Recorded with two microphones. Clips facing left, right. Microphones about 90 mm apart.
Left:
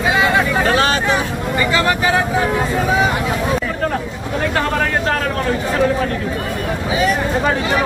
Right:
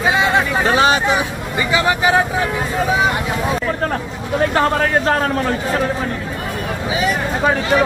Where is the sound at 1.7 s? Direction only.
15° right (ahead or behind).